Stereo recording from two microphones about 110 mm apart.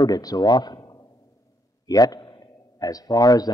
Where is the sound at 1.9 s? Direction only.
35° left (ahead or behind).